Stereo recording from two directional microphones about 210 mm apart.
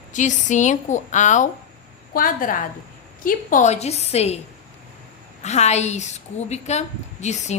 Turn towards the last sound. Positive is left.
turn(degrees=35)  # may be behind; listen again after turning